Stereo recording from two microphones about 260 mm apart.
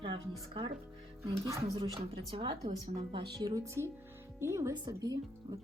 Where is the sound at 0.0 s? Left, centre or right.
Centre.